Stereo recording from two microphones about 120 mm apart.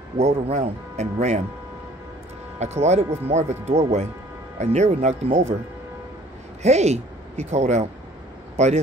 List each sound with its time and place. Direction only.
0.2 s speech: 70° right (ahead or behind)
2.6 s speech: 70° right (ahead or behind)
6.6 s speech: 65° right (ahead or behind)